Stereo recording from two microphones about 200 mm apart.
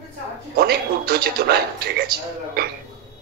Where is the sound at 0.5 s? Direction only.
50° right (ahead or behind).